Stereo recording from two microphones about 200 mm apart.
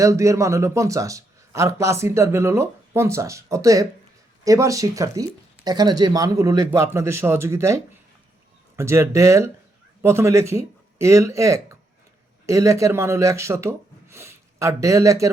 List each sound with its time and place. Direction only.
0.0 s a man's voice: 15° right (ahead or behind)